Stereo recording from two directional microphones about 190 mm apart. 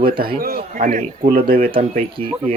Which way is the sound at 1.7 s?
30° right (ahead or behind).